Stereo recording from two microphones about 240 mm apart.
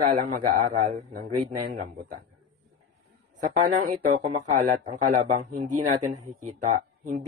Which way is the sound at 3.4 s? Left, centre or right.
Right.